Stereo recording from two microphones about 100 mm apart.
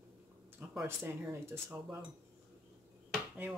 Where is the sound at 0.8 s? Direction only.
25° right (ahead or behind).